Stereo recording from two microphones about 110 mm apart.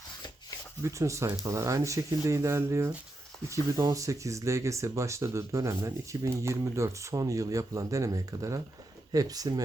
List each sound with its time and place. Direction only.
0.8 s speech: 25° right (ahead or behind)